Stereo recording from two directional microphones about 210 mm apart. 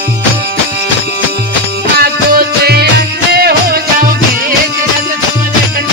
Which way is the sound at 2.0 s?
45° right (ahead or behind).